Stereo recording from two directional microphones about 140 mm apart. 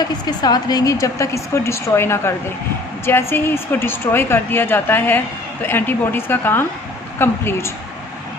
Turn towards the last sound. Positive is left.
turn(degrees=15)  # may be behind; listen again after turning